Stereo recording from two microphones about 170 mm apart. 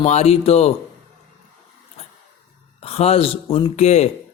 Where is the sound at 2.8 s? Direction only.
35° left (ahead or behind).